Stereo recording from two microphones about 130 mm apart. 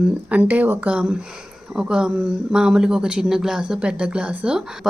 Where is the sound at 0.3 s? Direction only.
10° right (ahead or behind).